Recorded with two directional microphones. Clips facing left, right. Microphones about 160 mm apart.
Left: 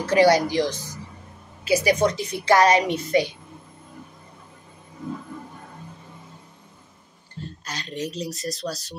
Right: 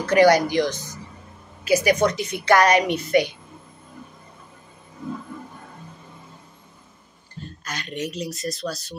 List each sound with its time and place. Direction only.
0.0 s a woman's voice: 25° left (ahead or behind)
7.6 s speech: 30° left (ahead or behind)